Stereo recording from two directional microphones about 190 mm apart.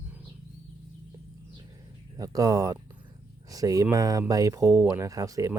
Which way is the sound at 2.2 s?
20° right (ahead or behind).